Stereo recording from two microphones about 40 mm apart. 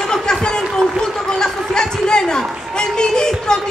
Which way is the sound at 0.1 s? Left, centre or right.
Centre.